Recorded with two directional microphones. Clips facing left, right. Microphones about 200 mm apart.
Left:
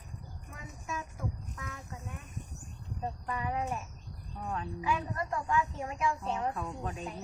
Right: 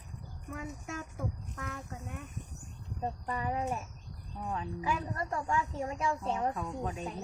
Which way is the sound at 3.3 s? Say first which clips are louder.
Even; 30° right (ahead or behind).